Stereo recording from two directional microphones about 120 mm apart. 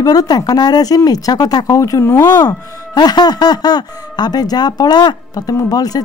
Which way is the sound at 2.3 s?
35° left (ahead or behind).